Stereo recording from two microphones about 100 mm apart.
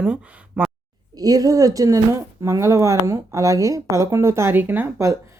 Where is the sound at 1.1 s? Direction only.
35° right (ahead or behind).